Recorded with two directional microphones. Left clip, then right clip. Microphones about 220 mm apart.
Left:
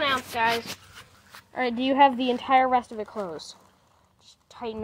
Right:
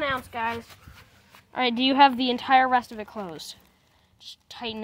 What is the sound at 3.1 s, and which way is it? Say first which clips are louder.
Speech: left 2 dB; 90° right.